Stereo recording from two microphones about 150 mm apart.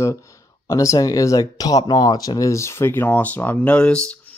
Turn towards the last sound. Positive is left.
turn(degrees=10)  # may be behind; listen again after turning